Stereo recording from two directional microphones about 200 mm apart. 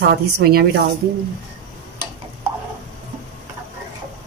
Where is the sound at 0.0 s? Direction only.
50° right (ahead or behind).